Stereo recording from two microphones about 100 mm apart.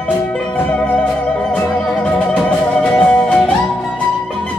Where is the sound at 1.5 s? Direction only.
10° left (ahead or behind).